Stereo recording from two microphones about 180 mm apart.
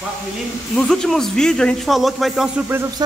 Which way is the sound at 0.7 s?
5° left (ahead or behind).